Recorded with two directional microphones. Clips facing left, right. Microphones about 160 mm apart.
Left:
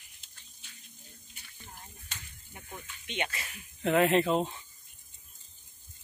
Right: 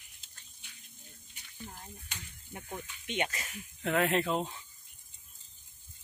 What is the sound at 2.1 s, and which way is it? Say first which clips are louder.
Speech: left 1 dB; 15° right (ahead or behind).